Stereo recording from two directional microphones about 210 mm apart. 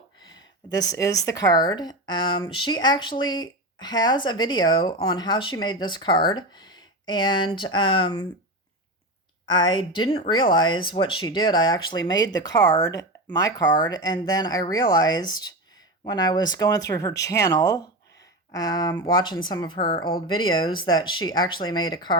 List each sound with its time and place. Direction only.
0.2 s speech: 20° left (ahead or behind)
9.5 s speech: 20° left (ahead or behind)